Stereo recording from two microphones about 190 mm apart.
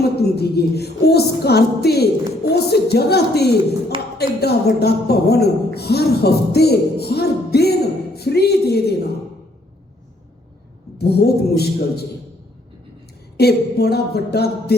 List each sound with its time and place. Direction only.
0.0 s speech: 55° left (ahead or behind)
3.9 s speech: 25° right (ahead or behind)
4.4 s speech: 60° left (ahead or behind)
10.9 s speech: 55° left (ahead or behind)
13.4 s speech: 55° left (ahead or behind)